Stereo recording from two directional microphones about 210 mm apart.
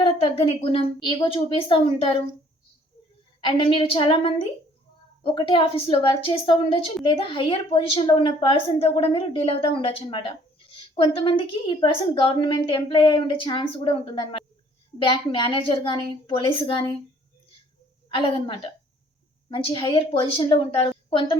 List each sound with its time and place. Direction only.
0.0 s a woman's voice: 25° left (ahead or behind)
3.4 s a woman's voice: 25° left (ahead or behind)
18.1 s a woman's voice: 25° left (ahead or behind)